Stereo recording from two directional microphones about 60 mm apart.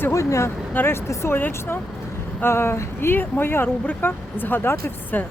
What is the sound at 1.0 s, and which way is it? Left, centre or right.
Speech, left.